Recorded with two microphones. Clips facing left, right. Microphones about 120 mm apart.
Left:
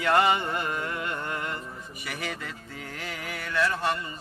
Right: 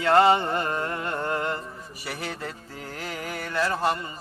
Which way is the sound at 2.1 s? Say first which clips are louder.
Right 1 dB; 30° right (ahead or behind).